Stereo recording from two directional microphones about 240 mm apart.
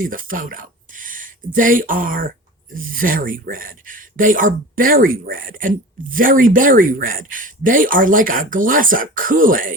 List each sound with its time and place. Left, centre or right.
0.0 s speech: right